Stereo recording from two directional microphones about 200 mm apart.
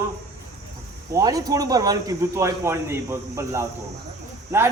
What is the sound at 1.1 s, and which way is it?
Speech, 15° right (ahead or behind).